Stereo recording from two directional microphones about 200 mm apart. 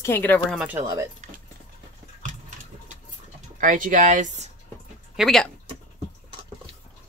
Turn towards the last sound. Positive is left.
turn(degrees=0)  # may be behind; listen again after turning